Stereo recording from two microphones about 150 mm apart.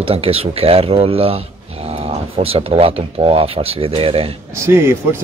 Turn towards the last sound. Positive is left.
turn(degrees=-15)  # may be behind; listen again after turning